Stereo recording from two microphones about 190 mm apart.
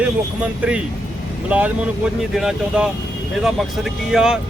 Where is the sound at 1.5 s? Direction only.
5° right (ahead or behind).